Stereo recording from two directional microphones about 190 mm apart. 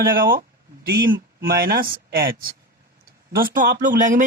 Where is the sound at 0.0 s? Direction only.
50° right (ahead or behind).